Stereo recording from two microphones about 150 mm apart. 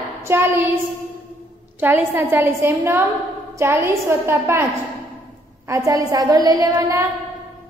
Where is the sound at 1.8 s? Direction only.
15° right (ahead or behind).